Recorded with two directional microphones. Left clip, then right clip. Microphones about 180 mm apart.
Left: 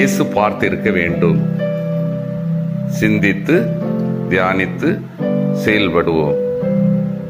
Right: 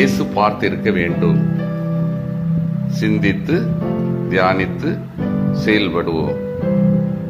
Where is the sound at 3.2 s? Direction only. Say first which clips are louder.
Left 4 dB; 10° left (ahead or behind).